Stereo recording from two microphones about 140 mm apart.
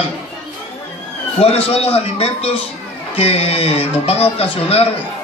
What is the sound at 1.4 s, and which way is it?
Speech, 45° left (ahead or behind).